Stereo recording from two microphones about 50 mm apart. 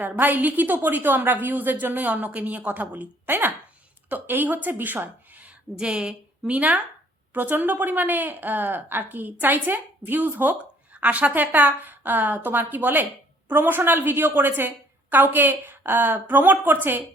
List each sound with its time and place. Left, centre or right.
0.0 s a woman's voice: right
5.7 s a woman's voice: centre
6.5 s a woman's voice: right